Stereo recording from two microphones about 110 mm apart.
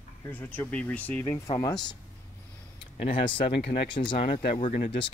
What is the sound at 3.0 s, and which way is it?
Speech, 55° left (ahead or behind).